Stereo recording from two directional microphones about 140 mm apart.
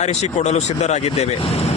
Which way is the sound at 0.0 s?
50° left (ahead or behind).